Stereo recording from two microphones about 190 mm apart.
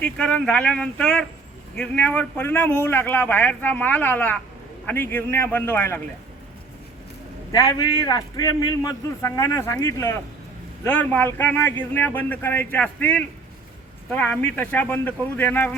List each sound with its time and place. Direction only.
0.0 s a man's voice: 5° left (ahead or behind)
7.5 s a man's voice: 20° left (ahead or behind)